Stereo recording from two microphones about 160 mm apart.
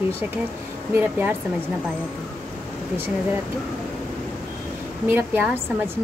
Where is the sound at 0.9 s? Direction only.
10° right (ahead or behind).